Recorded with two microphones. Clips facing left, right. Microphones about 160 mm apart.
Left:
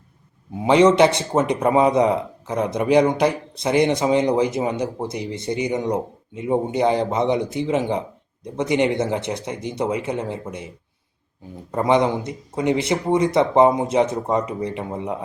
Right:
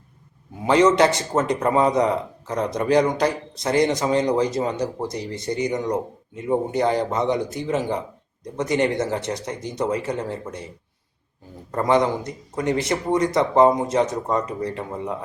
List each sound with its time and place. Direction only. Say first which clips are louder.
0.6 s speech: left 2 dB; 20° left (ahead or behind)
11.7 s speech: left 1 dB; 15° left (ahead or behind)